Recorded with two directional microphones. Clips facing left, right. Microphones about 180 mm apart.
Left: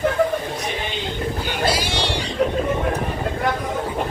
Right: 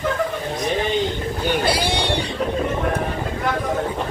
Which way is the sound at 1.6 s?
60° right (ahead or behind).